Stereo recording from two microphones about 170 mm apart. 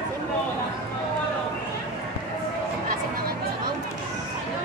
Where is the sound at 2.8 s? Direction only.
55° right (ahead or behind).